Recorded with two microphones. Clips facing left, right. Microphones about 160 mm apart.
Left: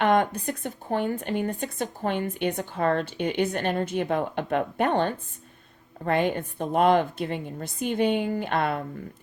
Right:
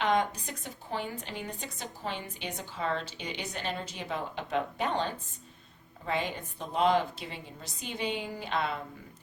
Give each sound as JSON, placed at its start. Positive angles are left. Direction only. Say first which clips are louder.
{"t": 0.0, "sound": "speech", "louder": "left 6 dB", "side_deg": 55}